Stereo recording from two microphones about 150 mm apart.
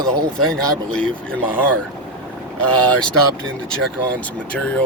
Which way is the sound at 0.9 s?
5° left (ahead or behind).